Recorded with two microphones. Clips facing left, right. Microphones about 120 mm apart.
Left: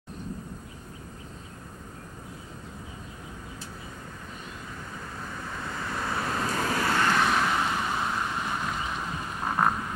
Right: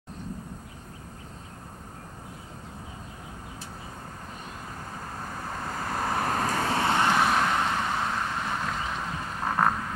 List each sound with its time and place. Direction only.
5.2 s vehicle: 40° right (ahead or behind); by 7.2 s 20° right (ahead or behind)
7.2 s vehicle: 5° right (ahead or behind)
7.7 s vehicle: 10° left (ahead or behind)